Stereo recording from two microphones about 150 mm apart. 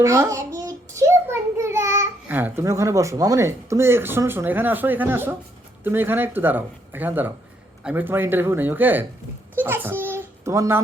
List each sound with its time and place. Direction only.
0.0 s a child's voice: 20° right (ahead or behind)